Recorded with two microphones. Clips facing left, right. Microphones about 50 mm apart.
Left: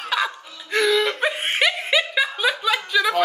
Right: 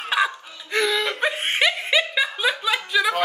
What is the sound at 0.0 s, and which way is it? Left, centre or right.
Music, right.